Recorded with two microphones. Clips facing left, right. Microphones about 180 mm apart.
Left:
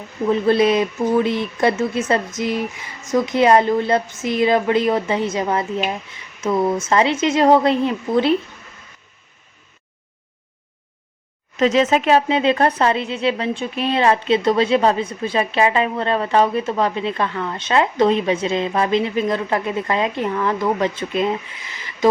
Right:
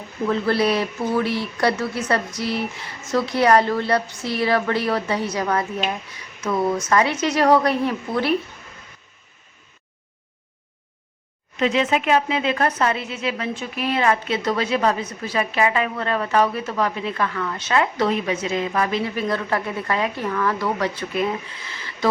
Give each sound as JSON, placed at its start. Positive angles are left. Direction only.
{"t": 0.3, "sound": "speech", "side_deg": 20}
{"t": 11.6, "sound": "speech", "side_deg": 40}